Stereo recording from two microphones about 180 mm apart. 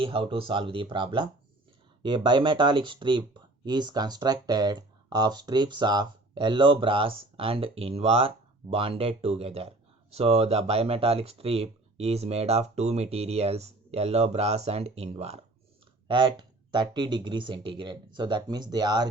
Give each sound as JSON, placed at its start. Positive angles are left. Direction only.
{"t": 0.0, "sound": "speech", "side_deg": -30}